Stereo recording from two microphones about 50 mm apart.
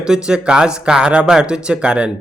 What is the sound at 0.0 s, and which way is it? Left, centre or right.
Speech, centre.